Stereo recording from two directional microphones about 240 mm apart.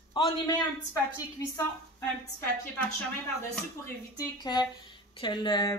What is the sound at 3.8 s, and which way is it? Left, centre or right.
Speech, centre.